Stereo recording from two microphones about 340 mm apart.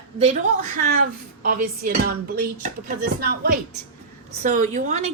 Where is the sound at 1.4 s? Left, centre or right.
Right.